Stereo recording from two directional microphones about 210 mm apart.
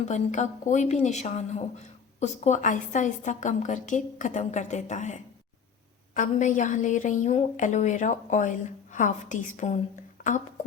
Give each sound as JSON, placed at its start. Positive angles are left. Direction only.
{"t": 0.0, "sound": "speech", "side_deg": 35}